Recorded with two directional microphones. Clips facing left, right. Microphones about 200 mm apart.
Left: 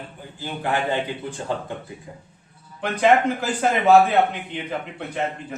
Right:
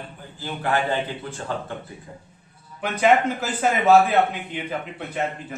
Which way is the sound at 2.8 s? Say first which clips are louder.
Left 1 dB; 5° right (ahead or behind).